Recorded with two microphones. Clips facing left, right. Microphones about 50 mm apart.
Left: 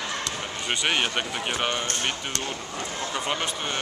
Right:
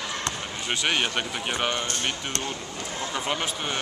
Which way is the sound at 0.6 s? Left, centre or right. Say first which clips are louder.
Even; centre.